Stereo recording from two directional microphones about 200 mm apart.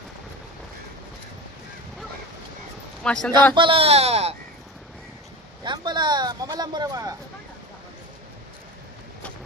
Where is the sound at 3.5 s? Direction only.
25° right (ahead or behind).